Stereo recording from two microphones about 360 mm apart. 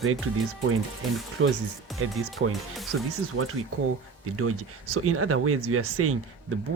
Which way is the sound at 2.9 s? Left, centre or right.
Right.